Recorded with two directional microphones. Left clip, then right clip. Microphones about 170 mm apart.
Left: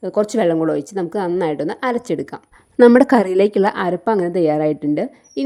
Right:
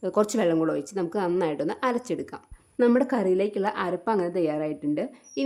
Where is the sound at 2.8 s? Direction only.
50° left (ahead or behind).